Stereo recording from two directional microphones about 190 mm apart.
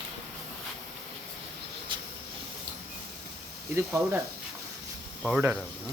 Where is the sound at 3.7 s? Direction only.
15° right (ahead or behind).